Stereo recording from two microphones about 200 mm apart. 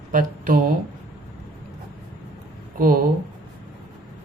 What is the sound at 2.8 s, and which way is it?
Speech, 45° right (ahead or behind).